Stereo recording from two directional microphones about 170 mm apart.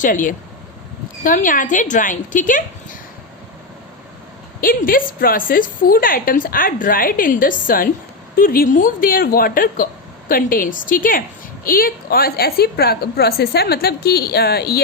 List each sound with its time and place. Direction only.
0.0 s a woman's voice: 50° left (ahead or behind)
4.6 s a woman's voice: 55° left (ahead or behind)